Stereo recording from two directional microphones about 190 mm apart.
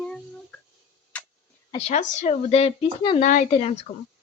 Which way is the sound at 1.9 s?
40° left (ahead or behind).